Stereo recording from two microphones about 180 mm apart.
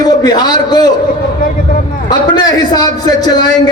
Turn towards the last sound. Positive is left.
turn(degrees=20)  # may be behind; listen again after turning